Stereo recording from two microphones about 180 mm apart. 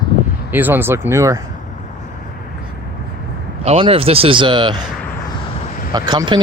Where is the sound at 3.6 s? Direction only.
35° right (ahead or behind).